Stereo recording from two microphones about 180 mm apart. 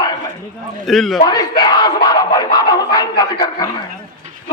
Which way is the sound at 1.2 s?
20° left (ahead or behind).